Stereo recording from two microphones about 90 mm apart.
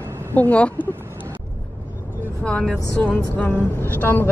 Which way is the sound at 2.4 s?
10° left (ahead or behind).